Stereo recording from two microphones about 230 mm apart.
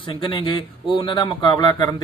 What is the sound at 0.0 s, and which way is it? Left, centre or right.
Speech, left.